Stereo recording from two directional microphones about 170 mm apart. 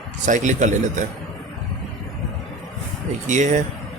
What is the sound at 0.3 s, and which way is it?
Speech, 45° right (ahead or behind).